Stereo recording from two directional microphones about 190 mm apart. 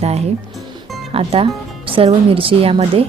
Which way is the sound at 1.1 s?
30° right (ahead or behind).